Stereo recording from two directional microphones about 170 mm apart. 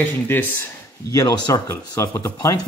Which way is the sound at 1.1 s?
20° left (ahead or behind).